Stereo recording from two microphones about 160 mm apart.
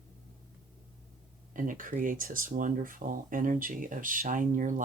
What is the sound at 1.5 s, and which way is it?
Speech, 55° right (ahead or behind).